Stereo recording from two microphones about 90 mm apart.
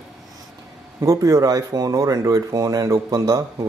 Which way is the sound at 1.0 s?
35° right (ahead or behind).